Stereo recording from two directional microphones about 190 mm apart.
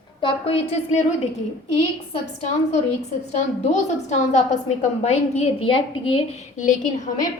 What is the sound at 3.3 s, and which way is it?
Speech, 35° left (ahead or behind).